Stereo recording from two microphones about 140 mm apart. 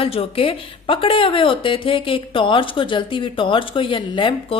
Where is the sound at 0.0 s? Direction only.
40° left (ahead or behind).